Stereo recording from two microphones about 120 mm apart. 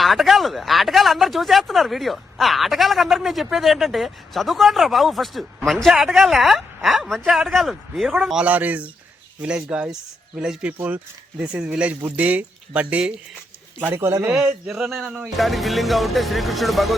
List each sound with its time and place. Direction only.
0.0 s speech: centre (ahead or behind); by 14.3 s 20° right (ahead or behind)
14.3 s speech: 5° right (ahead or behind)